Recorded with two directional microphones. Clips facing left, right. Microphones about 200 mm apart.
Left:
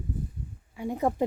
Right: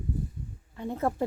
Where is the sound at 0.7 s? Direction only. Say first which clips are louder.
Left 2 dB; 10° left (ahead or behind).